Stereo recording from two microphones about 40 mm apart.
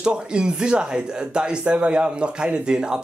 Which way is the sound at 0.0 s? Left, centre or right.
Right.